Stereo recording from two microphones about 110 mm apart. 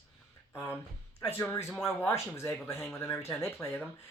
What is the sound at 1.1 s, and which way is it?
Speech, 25° left (ahead or behind).